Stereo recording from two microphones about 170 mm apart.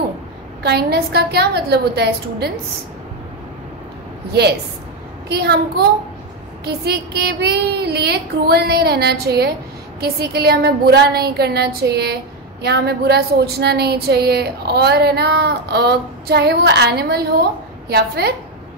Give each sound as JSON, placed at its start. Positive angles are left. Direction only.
{"t": 0.6, "sound": "speech", "side_deg": -70}
{"t": 4.3, "sound": "speech", "side_deg": -75}